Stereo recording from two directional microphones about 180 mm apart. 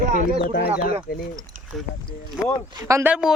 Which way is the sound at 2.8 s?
15° right (ahead or behind).